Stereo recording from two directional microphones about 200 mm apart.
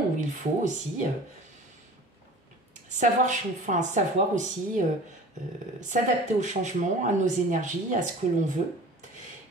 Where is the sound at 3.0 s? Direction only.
40° right (ahead or behind).